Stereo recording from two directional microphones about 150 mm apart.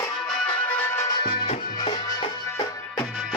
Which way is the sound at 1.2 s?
30° left (ahead or behind).